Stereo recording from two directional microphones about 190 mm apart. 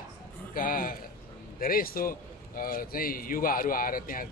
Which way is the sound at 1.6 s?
50° left (ahead or behind).